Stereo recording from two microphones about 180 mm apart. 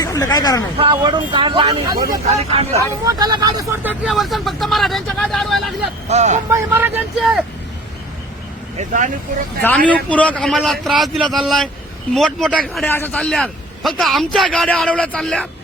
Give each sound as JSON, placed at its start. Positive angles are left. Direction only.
{"t": 0.0, "sound": "speech", "side_deg": 20}
{"t": 0.8, "sound": "speech", "side_deg": -25}
{"t": 2.0, "sound": "speech", "side_deg": -35}
{"t": 2.7, "sound": "speech", "side_deg": -20}
{"t": 6.1, "sound": "speech", "side_deg": -40}
{"t": 6.5, "sound": "speech", "side_deg": -15}
{"t": 8.8, "sound": "speech", "side_deg": -45}
{"t": 9.6, "sound": "speech", "side_deg": 10}